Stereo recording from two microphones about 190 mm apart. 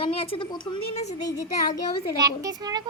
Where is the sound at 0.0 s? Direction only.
30° left (ahead or behind).